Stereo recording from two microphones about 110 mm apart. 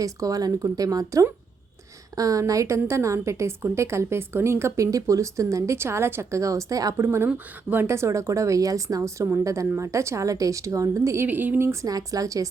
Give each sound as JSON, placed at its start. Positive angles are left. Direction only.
{"t": 0.0, "sound": "a woman's voice", "side_deg": -30}